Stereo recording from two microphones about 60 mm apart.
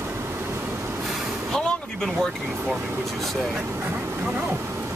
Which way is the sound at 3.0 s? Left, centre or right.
Centre.